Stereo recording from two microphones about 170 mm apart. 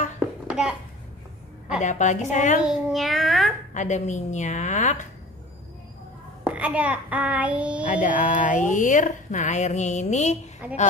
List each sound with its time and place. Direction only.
0.5 s a sound: 5° right (ahead or behind)
1.8 s speech: 45° left (ahead or behind)
2.6 s child singing: centre (ahead or behind)
3.7 s speech: 45° left (ahead or behind)
6.4 s child singing: 10° right (ahead or behind)
8.0 s speech: 50° left (ahead or behind)
10.6 s child singing: 10° right (ahead or behind)